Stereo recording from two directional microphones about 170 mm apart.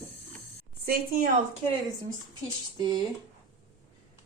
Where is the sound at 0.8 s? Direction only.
60° right (ahead or behind).